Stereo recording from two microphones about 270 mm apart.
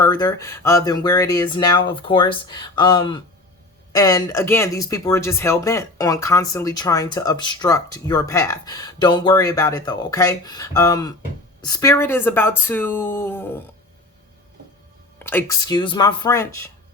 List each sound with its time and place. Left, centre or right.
0.0 s speech: centre
15.2 s speech: centre